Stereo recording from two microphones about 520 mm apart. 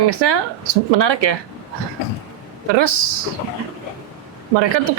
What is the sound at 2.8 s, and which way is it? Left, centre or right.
Speech, right.